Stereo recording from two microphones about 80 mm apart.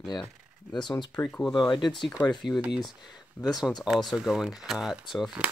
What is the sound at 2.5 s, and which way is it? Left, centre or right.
Speech, left.